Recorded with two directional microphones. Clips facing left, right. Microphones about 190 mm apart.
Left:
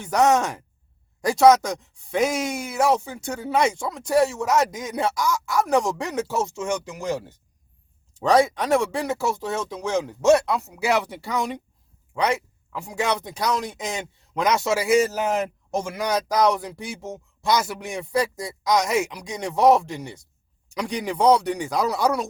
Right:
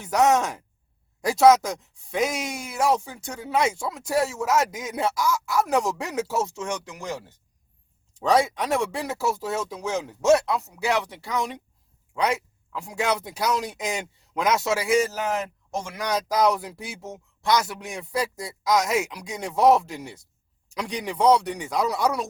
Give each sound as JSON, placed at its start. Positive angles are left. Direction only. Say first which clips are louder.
{"t": 0.0, "sound": "speech", "louder": "left 1 dB", "side_deg": -5}
{"t": 8.2, "sound": "speech", "louder": "left 3 dB", "side_deg": 0}